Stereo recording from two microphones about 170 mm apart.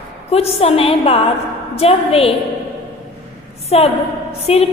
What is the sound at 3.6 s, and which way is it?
A woman's voice, 35° left (ahead or behind).